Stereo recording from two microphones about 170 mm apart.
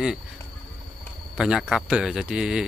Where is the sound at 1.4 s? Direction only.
5° right (ahead or behind).